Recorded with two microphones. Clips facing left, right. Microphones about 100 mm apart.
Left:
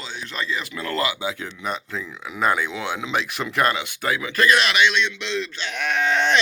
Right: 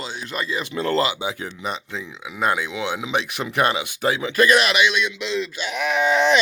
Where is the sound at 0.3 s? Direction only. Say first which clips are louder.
Right 1 dB; 15° right (ahead or behind).